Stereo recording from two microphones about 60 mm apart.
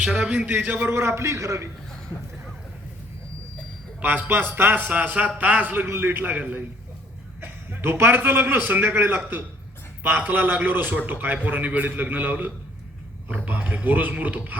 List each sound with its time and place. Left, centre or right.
0.0 s speech: centre
0.9 s a man's voice: right
4.0 s a man's voice: right